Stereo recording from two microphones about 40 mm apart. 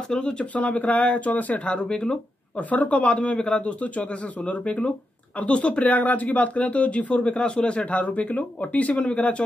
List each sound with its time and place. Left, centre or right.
0.1 s speech: left
0.6 s speech: left
2.5 s speech: left